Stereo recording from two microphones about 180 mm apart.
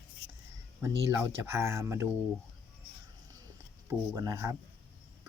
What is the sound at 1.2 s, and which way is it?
Speech, 15° right (ahead or behind).